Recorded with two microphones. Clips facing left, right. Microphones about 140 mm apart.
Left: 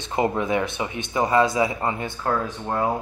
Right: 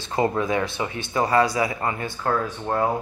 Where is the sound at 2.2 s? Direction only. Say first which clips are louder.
Right 1 dB; 10° left (ahead or behind).